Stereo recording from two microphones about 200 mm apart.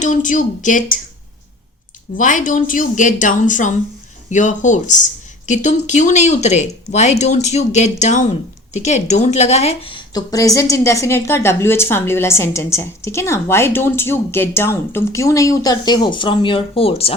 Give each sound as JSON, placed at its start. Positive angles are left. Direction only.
{"t": 0.0, "sound": "speech", "side_deg": 40}
{"t": 2.1, "sound": "a woman's voice", "side_deg": 40}